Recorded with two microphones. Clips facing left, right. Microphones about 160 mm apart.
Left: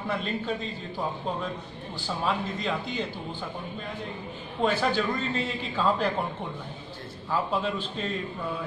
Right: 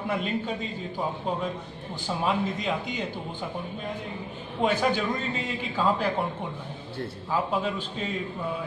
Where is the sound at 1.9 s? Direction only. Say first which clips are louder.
Right 2 dB; 15° right (ahead or behind).